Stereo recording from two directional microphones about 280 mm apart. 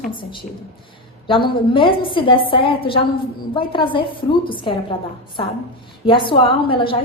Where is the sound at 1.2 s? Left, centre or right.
Centre.